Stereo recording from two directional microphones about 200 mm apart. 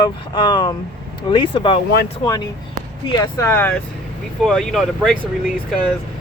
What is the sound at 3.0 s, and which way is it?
Speech, 20° left (ahead or behind).